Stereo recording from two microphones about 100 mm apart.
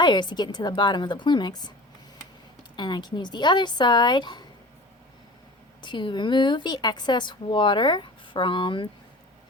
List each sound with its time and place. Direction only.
0.0 s speech: 50° left (ahead or behind)
2.7 s speech: 50° left (ahead or behind)
5.8 s speech: 50° left (ahead or behind)